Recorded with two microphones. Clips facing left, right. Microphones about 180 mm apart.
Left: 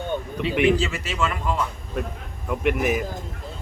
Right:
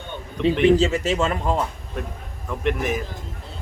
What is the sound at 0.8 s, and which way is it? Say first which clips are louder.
Speech: right 5 dB; 25° right (ahead or behind).